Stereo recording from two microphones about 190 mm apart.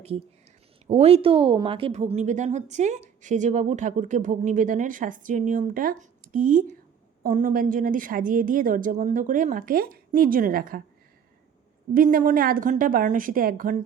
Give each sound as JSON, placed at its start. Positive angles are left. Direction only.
{"t": 0.9, "sound": "a woman's voice", "side_deg": -35}
{"t": 11.9, "sound": "a woman's voice", "side_deg": -50}